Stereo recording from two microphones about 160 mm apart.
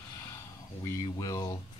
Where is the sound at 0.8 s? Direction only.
25° left (ahead or behind).